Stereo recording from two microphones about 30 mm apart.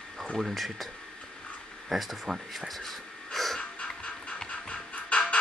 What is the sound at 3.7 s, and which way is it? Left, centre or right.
Music, left.